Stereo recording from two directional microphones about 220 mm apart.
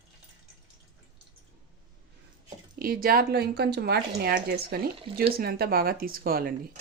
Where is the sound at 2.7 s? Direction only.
40° right (ahead or behind).